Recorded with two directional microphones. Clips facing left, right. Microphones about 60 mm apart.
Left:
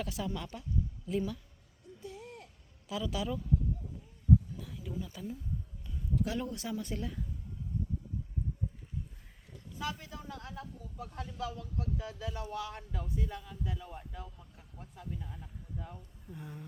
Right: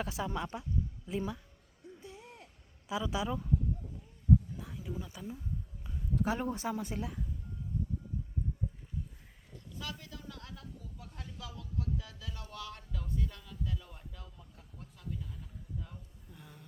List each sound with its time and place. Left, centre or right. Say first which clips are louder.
0.0 s a woman's voice: right 1 dB; right
2.0 s a sound: left 7 dB; right
2.9 s a woman's voice: right 1 dB; right
4.6 s a sound: left 1 dB; right
5.1 s speech: left 2 dB; centre
6.4 s a woman's voice: right 2 dB; right
6.9 s speech: even; centre
9.7 s a man's voice: left 5 dB; left
16.3 s speech: left 8 dB; left